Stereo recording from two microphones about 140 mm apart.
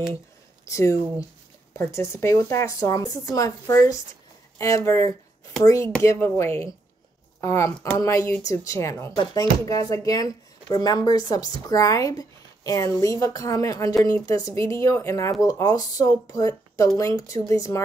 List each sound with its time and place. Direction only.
0.7 s speech: 20° left (ahead or behind)